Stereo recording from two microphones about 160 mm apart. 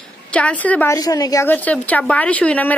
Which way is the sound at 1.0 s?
25° left (ahead or behind).